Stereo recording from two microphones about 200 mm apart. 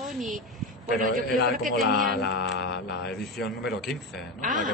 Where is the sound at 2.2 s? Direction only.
60° left (ahead or behind).